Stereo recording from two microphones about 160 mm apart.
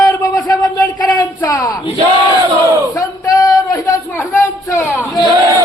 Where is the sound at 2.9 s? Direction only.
20° left (ahead or behind).